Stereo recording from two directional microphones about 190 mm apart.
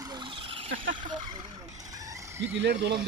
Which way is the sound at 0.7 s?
80° right.